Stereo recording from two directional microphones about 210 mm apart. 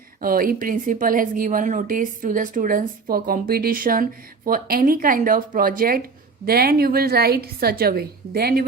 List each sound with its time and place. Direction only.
0.2 s a woman's voice: 45° right (ahead or behind)